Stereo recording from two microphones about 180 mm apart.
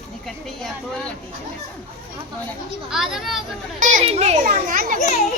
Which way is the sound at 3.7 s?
40° right (ahead or behind).